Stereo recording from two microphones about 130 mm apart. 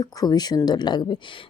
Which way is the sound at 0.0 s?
30° left (ahead or behind).